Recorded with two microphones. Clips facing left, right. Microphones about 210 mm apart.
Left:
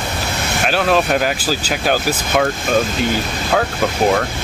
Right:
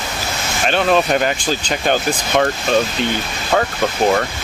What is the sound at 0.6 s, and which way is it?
Speech, 5° left (ahead or behind).